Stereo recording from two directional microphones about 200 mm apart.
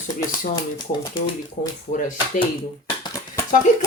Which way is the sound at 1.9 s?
40° left (ahead or behind).